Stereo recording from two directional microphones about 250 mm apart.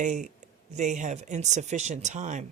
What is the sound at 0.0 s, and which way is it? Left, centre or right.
Speech, right.